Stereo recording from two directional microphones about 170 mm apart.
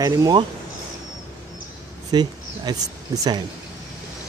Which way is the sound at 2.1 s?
25° right (ahead or behind).